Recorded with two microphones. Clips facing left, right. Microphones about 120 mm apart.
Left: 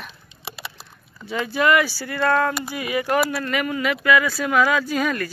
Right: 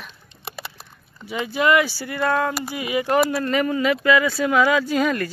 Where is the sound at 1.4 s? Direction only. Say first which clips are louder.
Even; 20° right (ahead or behind).